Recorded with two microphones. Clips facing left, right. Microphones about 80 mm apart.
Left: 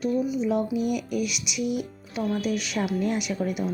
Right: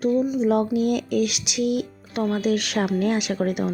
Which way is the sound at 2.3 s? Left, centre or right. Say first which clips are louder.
Right 6 dB; right.